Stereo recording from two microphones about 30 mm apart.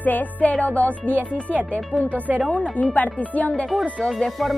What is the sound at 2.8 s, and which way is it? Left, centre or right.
Speech, left.